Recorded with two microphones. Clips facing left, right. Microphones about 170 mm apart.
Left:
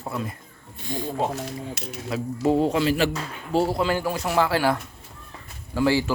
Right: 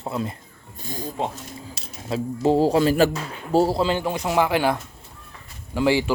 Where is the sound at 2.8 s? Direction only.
45° right (ahead or behind).